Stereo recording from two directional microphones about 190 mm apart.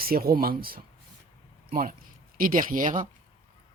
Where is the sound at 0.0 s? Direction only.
50° right (ahead or behind).